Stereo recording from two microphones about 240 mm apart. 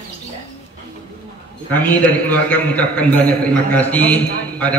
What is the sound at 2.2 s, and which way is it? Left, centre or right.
A man's voice, centre.